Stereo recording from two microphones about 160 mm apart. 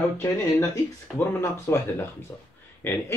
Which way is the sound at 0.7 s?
15° left (ahead or behind).